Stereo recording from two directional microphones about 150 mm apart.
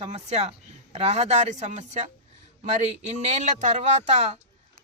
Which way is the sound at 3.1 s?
50° right (ahead or behind).